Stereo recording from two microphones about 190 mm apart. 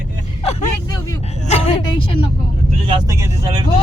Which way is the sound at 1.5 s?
30° left (ahead or behind).